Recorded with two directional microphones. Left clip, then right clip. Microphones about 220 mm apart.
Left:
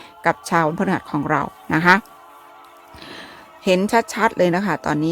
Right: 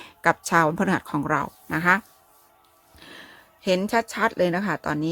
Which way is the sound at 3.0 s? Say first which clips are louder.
Left 6 dB; 25° left (ahead or behind).